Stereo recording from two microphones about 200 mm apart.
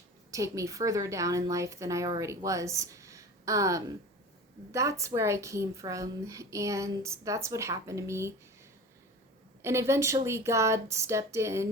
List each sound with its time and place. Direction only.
0.3 s a woman's voice: 15° right (ahead or behind)
9.6 s a woman's voice: 15° right (ahead or behind)